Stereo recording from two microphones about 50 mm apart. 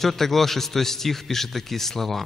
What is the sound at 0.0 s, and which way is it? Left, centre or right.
A man's voice, centre.